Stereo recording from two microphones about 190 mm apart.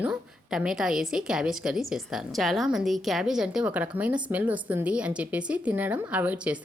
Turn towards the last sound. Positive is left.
turn(degrees=-5)  # may be behind; listen again after turning